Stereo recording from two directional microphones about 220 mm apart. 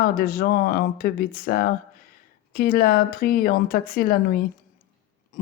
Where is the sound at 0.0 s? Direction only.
40° left (ahead or behind).